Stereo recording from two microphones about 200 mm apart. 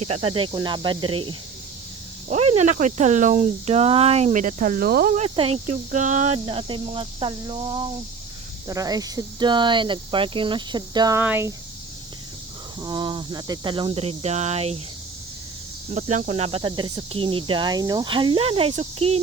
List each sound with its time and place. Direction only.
0.0 s speech: 30° right (ahead or behind); by 5.2 s 45° right (ahead or behind)
5.2 s speech: 30° right (ahead or behind); by 11.5 s 10° right (ahead or behind)
12.8 s speech: 20° right (ahead or behind)
16.0 s speech: 35° right (ahead or behind)